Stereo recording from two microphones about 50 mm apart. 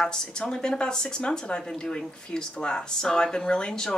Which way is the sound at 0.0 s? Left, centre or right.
Centre.